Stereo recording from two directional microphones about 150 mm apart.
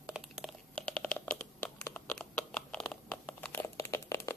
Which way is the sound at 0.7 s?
5° left (ahead or behind).